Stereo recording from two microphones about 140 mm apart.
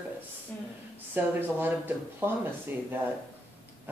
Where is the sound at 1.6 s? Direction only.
15° right (ahead or behind).